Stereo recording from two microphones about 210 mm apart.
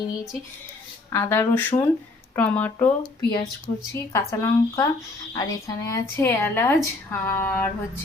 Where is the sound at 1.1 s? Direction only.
10° left (ahead or behind).